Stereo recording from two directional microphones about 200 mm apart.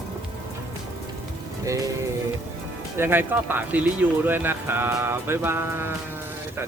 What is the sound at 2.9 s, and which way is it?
Speech, 10° right (ahead or behind).